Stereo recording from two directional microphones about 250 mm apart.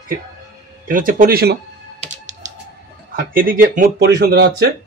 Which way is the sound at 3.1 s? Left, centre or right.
Right.